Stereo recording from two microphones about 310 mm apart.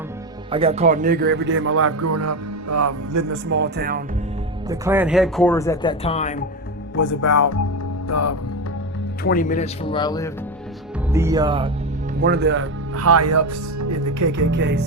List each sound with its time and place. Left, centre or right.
0.5 s speech: centre; by 3.3 s right
3.5 s speech: right
4.7 s speech: centre; by 6.4 s left
6.9 s music: left
7.2 s speech: left
8.0 s music: left
9.2 s a man's voice: left
11.1 s speech: centre
12.2 s speech: right
14.5 s speech: right